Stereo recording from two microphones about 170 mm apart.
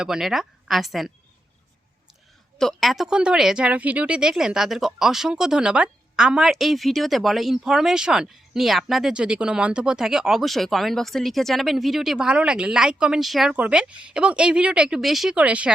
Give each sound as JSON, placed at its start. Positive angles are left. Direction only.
{"t": 0.0, "sound": "speech", "side_deg": -5}
{"t": 2.6, "sound": "speech", "side_deg": 0}